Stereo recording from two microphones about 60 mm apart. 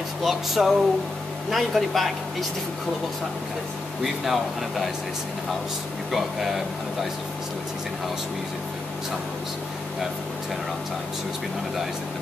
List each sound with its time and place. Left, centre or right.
0.2 s speech: centre
4.0 s speech: centre
6.1 s speech: centre